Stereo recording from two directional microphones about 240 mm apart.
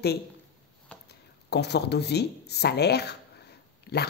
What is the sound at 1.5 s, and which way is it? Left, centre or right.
Speech, left.